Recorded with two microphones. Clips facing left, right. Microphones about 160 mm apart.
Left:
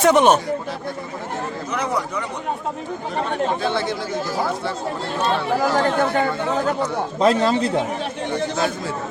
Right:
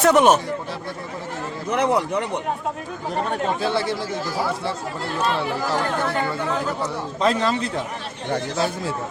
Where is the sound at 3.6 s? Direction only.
5° right (ahead or behind).